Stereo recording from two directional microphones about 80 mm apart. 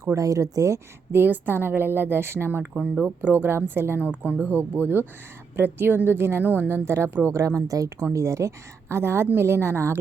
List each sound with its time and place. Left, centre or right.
0.0 s a woman's voice: right
2.7 s a woman's voice: centre; by 10.0 s right